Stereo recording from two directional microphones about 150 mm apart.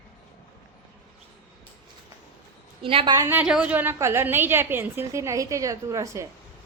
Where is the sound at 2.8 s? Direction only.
35° right (ahead or behind).